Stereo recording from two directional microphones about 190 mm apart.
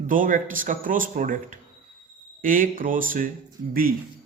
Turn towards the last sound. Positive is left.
turn(degrees=-50)  # may be behind; listen again after turning